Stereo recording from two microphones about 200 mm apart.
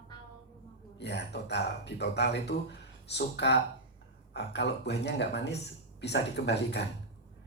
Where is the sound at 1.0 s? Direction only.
60° left (ahead or behind).